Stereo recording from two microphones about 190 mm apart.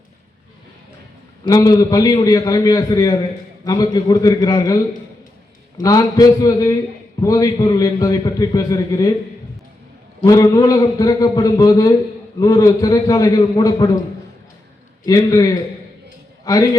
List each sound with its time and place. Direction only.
1.5 s a man's voice: 20° left (ahead or behind)
5.8 s a man's voice: 20° left (ahead or behind)
10.2 s a man's voice: 20° left (ahead or behind)
15.0 s a man's voice: 20° left (ahead or behind)